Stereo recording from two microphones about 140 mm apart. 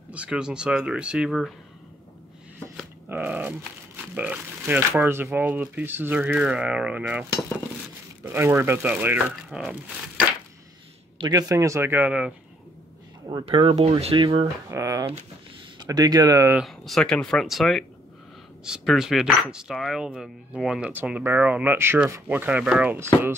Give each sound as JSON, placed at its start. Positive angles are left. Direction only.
{"t": 0.1, "sound": "speech", "side_deg": -5}
{"t": 3.1, "sound": "speech", "side_deg": -10}
{"t": 11.1, "sound": "a man's voice", "side_deg": -30}
{"t": 13.3, "sound": "speech", "side_deg": -35}
{"t": 14.7, "sound": "a man's voice", "side_deg": -20}
{"t": 16.5, "sound": "speech", "side_deg": 0}